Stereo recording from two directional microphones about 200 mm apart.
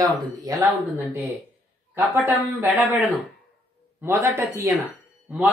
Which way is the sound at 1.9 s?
10° right (ahead or behind).